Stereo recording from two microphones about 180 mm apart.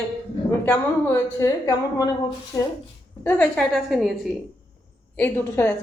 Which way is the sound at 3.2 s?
10° left (ahead or behind).